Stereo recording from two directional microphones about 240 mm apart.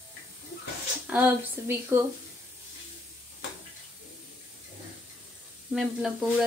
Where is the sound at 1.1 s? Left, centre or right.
Centre.